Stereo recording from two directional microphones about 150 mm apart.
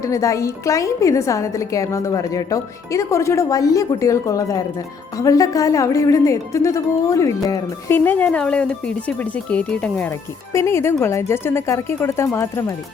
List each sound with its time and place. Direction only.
0.0 s speech: 20° left (ahead or behind)
10.1 s speech: 20° left (ahead or behind)